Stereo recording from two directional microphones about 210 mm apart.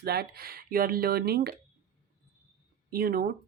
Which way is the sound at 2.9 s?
45° right (ahead or behind).